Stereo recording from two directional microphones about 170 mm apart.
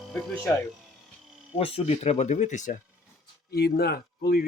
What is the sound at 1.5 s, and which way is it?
Speech, 35° left (ahead or behind).